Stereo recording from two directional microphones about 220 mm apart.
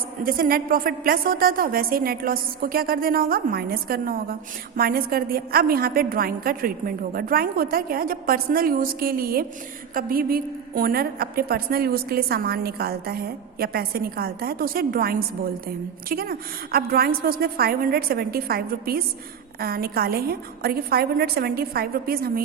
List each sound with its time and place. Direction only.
0.3 s a woman's voice: 40° right (ahead or behind)